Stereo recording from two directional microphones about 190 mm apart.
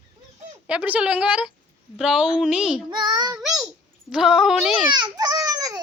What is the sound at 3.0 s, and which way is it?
Child singing, 20° right (ahead or behind).